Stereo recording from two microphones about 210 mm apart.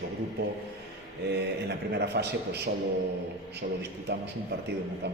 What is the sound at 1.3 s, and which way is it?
A man's voice, 50° right (ahead or behind).